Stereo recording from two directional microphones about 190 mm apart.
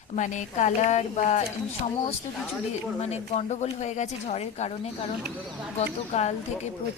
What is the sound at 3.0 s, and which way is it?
Speech, 35° left (ahead or behind).